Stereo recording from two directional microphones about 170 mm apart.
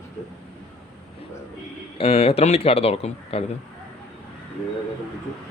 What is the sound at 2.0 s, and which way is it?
Speech, 40° left (ahead or behind).